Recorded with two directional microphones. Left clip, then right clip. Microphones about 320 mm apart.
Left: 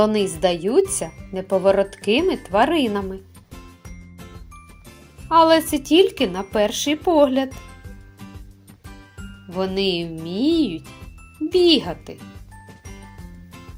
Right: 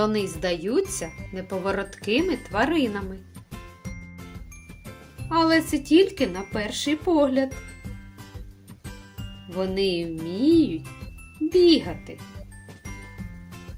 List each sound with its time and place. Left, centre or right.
0.0 s speech: centre
5.3 s speech: centre
9.6 s speech: centre